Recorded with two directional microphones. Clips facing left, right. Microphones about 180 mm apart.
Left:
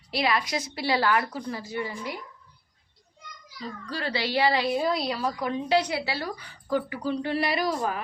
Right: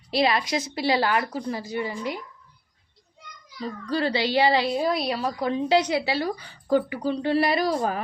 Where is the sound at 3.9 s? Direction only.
25° right (ahead or behind).